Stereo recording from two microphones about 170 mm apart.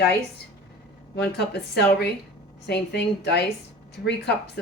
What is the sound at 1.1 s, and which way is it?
A woman's voice, 75° left (ahead or behind).